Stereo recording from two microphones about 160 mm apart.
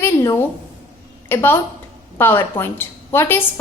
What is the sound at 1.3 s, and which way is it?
A woman's voice, 15° left (ahead or behind).